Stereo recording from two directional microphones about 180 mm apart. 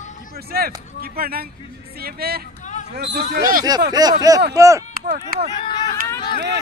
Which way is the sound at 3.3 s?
50° right (ahead or behind).